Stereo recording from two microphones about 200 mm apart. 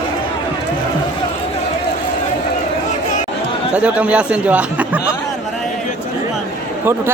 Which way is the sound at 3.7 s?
5° right (ahead or behind).